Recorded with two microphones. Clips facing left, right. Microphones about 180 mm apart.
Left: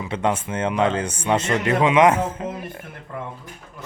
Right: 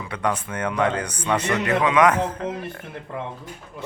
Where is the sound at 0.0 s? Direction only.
25° left (ahead or behind).